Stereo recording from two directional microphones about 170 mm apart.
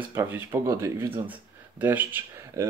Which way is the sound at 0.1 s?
15° right (ahead or behind).